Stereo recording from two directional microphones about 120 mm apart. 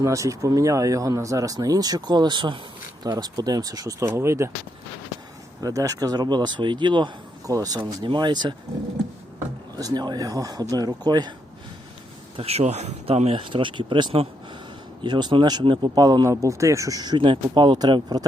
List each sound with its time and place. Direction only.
0.0 s speech: 25° right (ahead or behind)
5.5 s speech: 30° right (ahead or behind)
9.7 s speech: 35° right (ahead or behind)
12.4 s speech: 60° right (ahead or behind); by 18.3 s 35° right (ahead or behind)